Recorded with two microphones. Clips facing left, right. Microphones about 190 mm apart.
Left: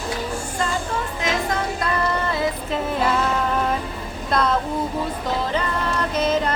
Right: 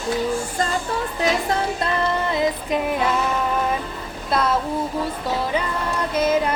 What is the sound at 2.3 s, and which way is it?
Music, 20° right (ahead or behind).